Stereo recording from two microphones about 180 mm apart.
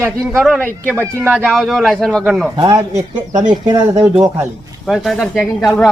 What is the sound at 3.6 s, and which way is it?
Speech, 20° right (ahead or behind).